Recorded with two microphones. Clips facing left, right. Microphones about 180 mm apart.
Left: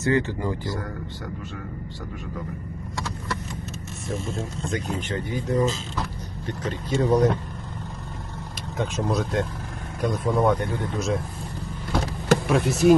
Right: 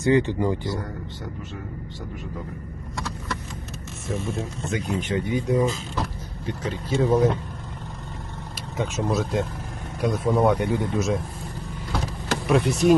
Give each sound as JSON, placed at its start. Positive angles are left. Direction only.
{"t": 0.0, "sound": "speech", "side_deg": -15}
{"t": 4.1, "sound": "speech", "side_deg": -15}
{"t": 8.8, "sound": "speech", "side_deg": -5}
{"t": 12.5, "sound": "speech", "side_deg": 0}